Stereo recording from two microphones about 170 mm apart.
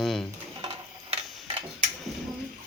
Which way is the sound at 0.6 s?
30° right (ahead or behind).